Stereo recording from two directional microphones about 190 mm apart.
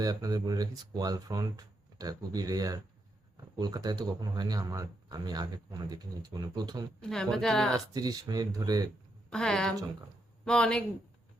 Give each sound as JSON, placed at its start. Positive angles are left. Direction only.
{"t": 0.0, "sound": "speech", "side_deg": -20}
{"t": 7.0, "sound": "speech", "side_deg": 5}
{"t": 7.9, "sound": "speech", "side_deg": -20}
{"t": 9.3, "sound": "speech", "side_deg": 5}